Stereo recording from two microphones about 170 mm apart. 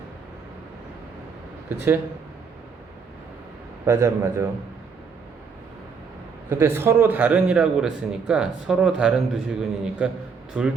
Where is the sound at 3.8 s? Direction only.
15° right (ahead or behind).